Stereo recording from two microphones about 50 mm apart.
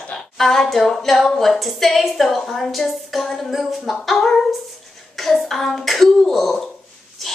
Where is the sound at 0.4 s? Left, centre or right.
Centre.